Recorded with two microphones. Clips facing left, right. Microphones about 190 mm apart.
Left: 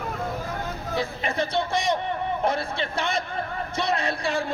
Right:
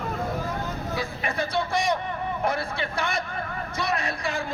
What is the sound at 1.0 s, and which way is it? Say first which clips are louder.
Speech: left 4 dB; 25° left (ahead or behind).